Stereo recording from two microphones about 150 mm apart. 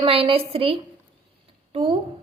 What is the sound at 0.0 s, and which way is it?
A woman's voice, 40° right (ahead or behind).